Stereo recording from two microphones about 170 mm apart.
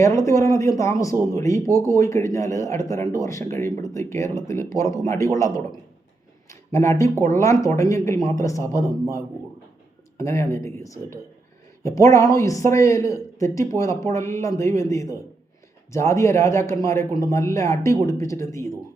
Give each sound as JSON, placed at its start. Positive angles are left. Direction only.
{"t": 0.0, "sound": "speech", "side_deg": 20}